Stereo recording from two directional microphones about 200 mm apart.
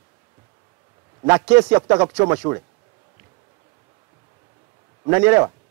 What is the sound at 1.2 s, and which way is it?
Speech, 10° right (ahead or behind).